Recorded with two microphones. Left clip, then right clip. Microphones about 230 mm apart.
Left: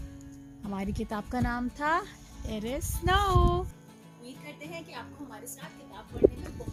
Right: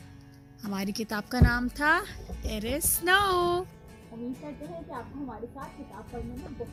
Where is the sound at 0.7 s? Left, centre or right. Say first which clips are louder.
Right 2 dB; right.